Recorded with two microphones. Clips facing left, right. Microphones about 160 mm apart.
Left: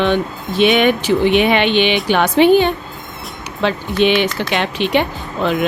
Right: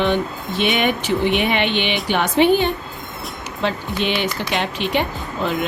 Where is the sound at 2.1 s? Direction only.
90° left.